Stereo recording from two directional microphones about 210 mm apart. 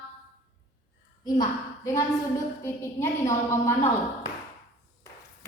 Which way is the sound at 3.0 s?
15° left (ahead or behind).